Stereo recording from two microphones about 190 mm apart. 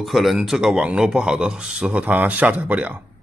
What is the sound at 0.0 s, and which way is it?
Speech, centre (ahead or behind).